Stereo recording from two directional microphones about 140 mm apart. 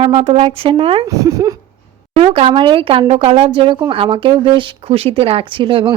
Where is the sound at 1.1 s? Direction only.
25° right (ahead or behind).